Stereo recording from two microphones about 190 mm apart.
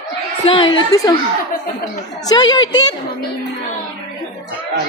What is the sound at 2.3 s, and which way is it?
Speech, 20° left (ahead or behind).